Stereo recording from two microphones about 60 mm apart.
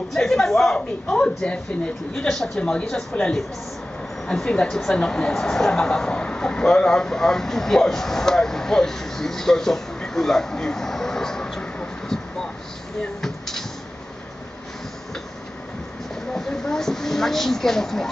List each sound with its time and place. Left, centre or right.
0.1 s a woman's voice: centre
0.7 s a woman's voice: centre
13.2 s music: centre
16.3 s speech: centre